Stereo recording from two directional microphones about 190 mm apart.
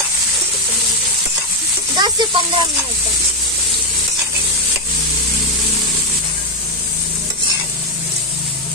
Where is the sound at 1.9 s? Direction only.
25° right (ahead or behind).